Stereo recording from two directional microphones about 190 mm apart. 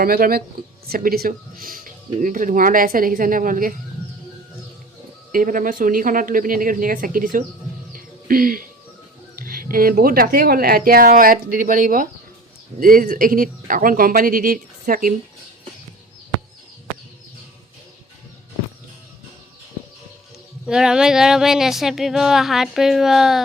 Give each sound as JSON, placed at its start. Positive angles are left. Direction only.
{"t": 0.0, "sound": "speech", "side_deg": -50}
{"t": 5.3, "sound": "speech", "side_deg": -45}
{"t": 7.9, "sound": "music", "side_deg": -50}
{"t": 9.3, "sound": "speech", "side_deg": -50}
{"t": 20.7, "sound": "speech", "side_deg": -5}